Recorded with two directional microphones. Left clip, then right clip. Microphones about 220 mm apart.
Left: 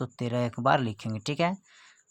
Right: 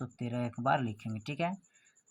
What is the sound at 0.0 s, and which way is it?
Speech, 40° left (ahead or behind).